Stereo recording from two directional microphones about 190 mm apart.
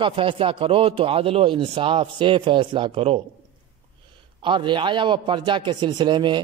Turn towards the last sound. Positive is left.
turn(degrees=-25)  # may be behind; listen again after turning